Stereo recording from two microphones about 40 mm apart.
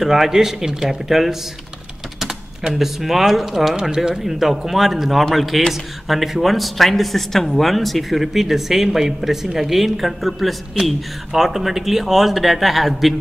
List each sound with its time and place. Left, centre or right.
0.0 s speech: centre
3.8 s speech: centre